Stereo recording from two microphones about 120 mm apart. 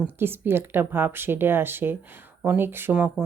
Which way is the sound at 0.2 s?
20° right (ahead or behind).